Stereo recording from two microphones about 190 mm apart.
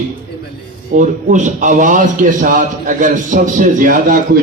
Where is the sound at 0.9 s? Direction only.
40° right (ahead or behind).